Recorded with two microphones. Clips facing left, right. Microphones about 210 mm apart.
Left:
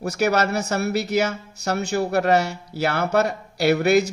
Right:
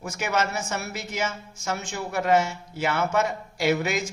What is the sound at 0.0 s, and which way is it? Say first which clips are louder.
Speech: left 6 dB; 70° left (ahead or behind).